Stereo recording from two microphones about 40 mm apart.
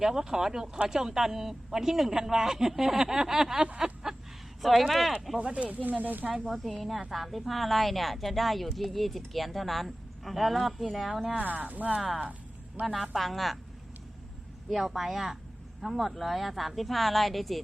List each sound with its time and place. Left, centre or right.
0.0 s a man's voice: centre
3.7 s speech: right
4.8 s speech: centre
5.4 s speech: right
6.0 s speech: right
6.5 s speech: centre
11.3 s speech: right
12.8 s speech: centre
14.7 s speech: centre